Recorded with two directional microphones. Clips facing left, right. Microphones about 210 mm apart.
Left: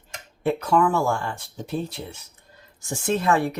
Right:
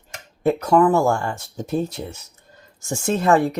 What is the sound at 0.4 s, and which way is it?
Speech, 40° right (ahead or behind).